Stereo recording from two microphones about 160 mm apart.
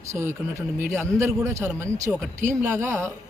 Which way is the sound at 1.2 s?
15° right (ahead or behind).